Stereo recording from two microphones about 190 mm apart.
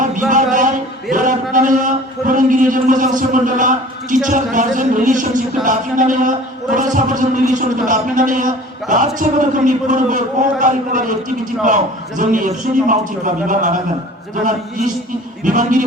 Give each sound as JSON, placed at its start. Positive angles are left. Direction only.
{"t": 0.0, "sound": "a sound", "side_deg": -45}
{"t": 1.1, "sound": "a man's voice", "side_deg": -45}
{"t": 15.4, "sound": "a man's voice", "side_deg": -45}